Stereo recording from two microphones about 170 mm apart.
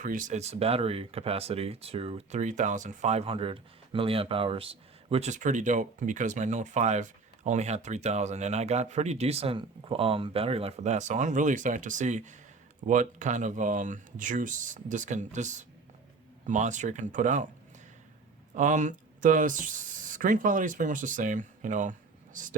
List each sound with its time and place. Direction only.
0.0 s speech: 50° right (ahead or behind)
18.5 s speech: 45° right (ahead or behind)